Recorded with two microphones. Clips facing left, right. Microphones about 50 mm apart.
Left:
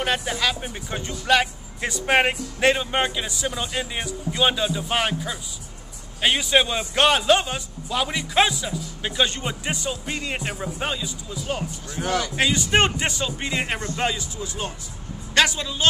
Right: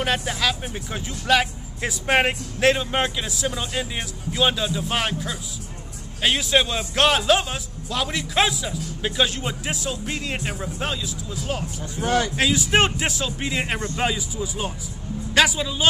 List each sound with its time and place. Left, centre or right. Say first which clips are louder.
0.0 s speech: even; centre
12.0 s a man's voice: right 2 dB; left
12.4 s a man's voice: left 3 dB; centre